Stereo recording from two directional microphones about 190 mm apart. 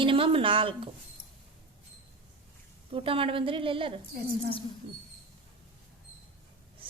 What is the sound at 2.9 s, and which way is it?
A woman's voice, 30° right (ahead or behind).